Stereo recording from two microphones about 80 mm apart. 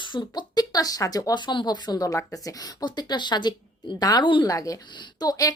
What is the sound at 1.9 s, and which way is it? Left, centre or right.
A woman's voice, left.